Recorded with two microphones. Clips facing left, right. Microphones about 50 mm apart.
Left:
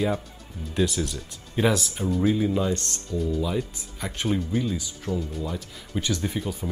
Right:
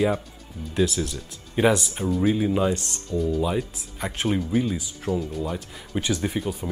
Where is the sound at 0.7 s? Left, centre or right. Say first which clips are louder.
Right 1 dB; centre.